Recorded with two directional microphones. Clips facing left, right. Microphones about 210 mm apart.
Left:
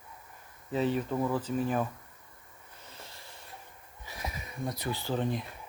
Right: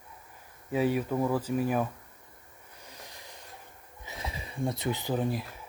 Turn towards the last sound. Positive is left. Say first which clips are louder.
# right 1 dB
turn(degrees=-5)  # may be behind; listen again after turning